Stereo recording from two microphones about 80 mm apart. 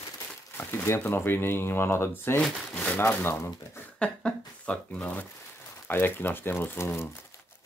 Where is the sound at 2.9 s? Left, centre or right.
Left.